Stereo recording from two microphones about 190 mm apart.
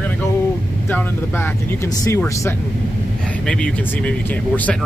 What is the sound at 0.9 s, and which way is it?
Speech, 10° left (ahead or behind).